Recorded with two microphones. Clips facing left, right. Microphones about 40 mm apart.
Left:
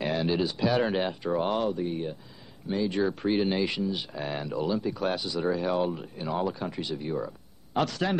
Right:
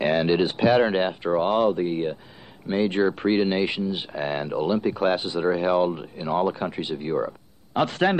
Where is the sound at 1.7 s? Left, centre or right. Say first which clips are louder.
Right 6 dB; right.